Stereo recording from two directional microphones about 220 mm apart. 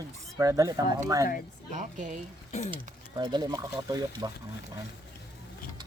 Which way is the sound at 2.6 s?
20° right (ahead or behind).